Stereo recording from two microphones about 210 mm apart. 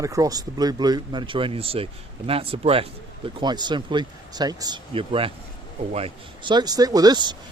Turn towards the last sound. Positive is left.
turn(degrees=-20)  # may be behind; listen again after turning